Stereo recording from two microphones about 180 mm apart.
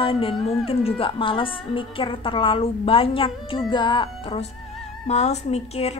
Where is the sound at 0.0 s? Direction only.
30° left (ahead or behind).